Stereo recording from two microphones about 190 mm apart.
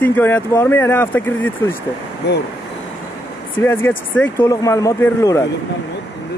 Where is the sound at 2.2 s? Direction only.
65° left (ahead or behind).